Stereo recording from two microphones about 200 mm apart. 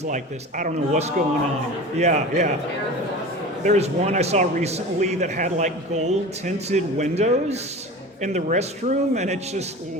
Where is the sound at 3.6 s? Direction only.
35° right (ahead or behind).